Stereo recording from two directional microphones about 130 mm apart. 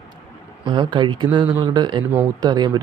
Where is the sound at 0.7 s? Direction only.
35° right (ahead or behind).